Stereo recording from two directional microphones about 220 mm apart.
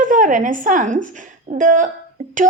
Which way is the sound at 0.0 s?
35° right (ahead or behind).